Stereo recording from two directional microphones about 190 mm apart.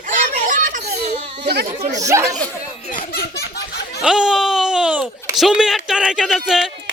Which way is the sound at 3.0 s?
55° left (ahead or behind).